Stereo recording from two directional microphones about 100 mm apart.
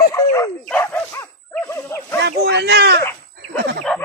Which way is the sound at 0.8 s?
25° left (ahead or behind).